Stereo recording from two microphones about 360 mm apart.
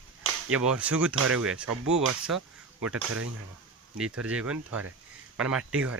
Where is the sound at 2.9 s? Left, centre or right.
Right.